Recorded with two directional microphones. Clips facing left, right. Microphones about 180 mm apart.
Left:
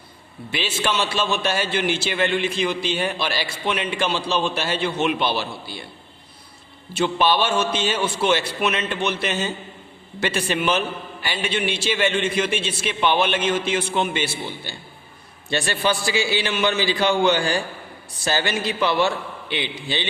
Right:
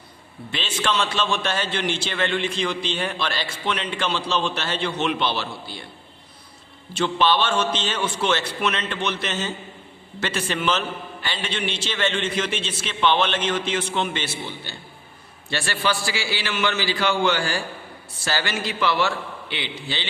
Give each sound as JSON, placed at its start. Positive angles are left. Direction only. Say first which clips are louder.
{"t": 0.5, "sound": "a man's voice", "louder": "left 1 dB", "side_deg": 10}
{"t": 6.9, "sound": "a man's voice", "louder": "left 1 dB", "side_deg": 10}